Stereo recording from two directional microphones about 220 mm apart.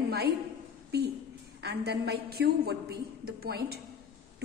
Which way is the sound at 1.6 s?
50° right (ahead or behind).